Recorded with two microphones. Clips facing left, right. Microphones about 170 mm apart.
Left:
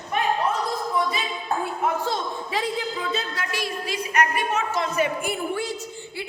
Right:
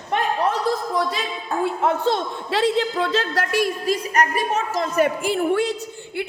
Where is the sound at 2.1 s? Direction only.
75° right (ahead or behind).